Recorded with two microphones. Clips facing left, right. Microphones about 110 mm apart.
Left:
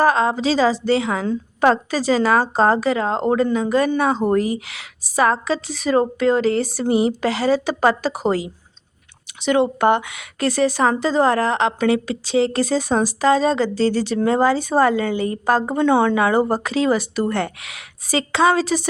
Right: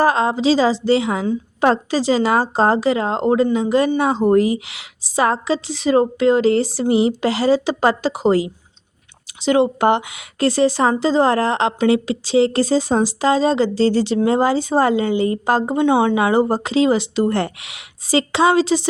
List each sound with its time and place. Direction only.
0.0 s speech: 30° right (ahead or behind)
9.7 s speech: 30° right (ahead or behind)